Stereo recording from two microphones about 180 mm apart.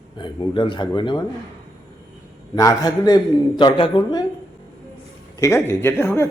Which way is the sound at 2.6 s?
20° left (ahead or behind).